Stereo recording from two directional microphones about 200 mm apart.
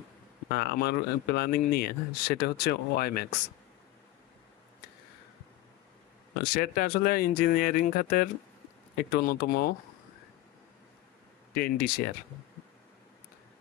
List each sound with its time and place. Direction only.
0.5 s speech: 55° left (ahead or behind)
6.5 s speech: 45° left (ahead or behind)
11.5 s speech: 50° left (ahead or behind)